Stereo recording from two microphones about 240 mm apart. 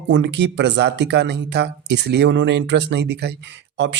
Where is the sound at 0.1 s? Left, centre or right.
Right.